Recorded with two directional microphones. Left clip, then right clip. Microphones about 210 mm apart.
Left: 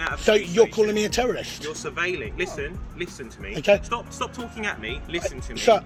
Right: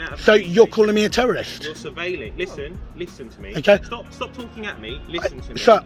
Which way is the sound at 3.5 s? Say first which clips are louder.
Right 4 dB; 40° right (ahead or behind).